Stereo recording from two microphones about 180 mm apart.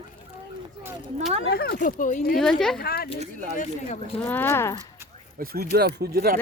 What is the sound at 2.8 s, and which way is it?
Speech, 60° left (ahead or behind).